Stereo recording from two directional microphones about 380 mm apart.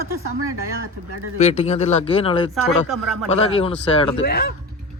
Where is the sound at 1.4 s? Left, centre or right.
Centre.